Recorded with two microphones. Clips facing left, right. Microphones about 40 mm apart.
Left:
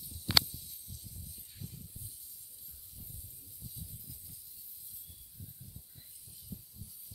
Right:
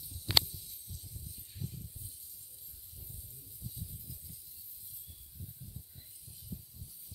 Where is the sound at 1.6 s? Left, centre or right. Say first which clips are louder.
Right 4 dB; right.